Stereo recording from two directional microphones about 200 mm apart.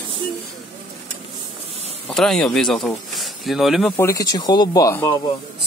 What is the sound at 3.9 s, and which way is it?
Speech, 15° left (ahead or behind).